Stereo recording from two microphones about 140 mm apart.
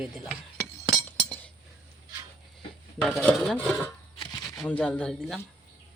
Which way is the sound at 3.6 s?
10° left (ahead or behind).